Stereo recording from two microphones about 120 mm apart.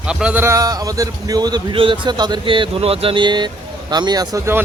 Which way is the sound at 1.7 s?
45° right (ahead or behind).